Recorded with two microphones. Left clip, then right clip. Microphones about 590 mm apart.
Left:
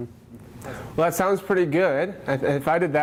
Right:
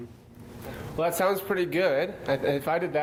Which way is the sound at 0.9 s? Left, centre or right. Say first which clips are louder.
Left 4 dB; left.